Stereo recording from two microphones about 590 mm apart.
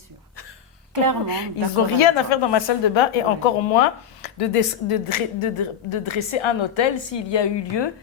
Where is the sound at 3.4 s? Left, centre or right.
Left.